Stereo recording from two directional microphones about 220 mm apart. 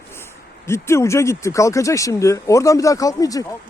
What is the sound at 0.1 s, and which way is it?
Speech, 10° left (ahead or behind).